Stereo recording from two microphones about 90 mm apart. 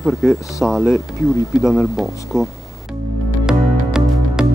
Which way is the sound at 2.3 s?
35° left (ahead or behind).